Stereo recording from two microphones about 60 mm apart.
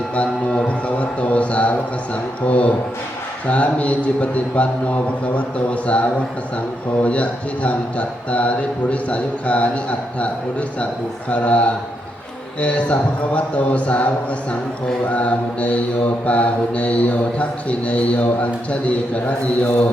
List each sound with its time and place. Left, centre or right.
0.1 s mantra: centre
15.1 s mantra: left